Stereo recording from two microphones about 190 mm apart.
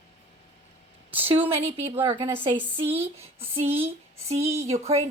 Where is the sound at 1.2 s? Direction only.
30° right (ahead or behind).